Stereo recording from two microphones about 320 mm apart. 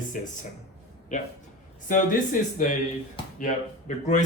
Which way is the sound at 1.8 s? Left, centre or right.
Left.